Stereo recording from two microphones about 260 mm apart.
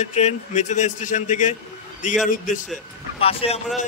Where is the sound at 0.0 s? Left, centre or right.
Left.